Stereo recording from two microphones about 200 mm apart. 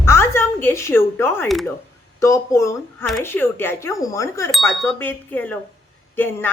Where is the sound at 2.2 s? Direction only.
15° left (ahead or behind).